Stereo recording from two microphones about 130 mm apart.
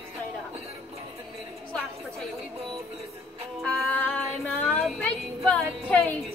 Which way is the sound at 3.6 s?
5° left (ahead or behind).